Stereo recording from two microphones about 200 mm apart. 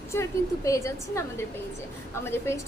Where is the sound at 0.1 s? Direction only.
15° left (ahead or behind).